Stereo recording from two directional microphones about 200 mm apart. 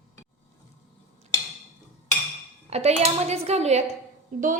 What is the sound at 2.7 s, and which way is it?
A woman's voice, 30° right (ahead or behind).